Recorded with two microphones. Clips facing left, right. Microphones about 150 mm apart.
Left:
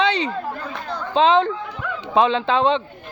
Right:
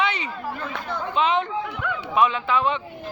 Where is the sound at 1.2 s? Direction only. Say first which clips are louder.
Left 7 dB; 90° left.